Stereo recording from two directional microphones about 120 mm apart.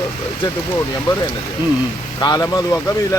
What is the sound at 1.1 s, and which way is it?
Speech, 45° left (ahead or behind).